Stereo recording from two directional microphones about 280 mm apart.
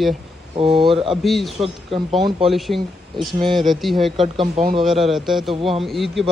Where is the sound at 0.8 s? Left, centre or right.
Centre.